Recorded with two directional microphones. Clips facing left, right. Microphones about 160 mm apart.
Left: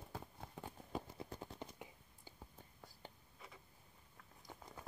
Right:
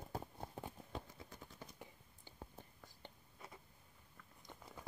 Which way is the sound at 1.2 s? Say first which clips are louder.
Left 5 dB; 35° left (ahead or behind).